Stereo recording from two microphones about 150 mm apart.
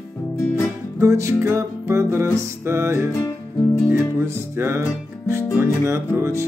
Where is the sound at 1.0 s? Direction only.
20° right (ahead or behind).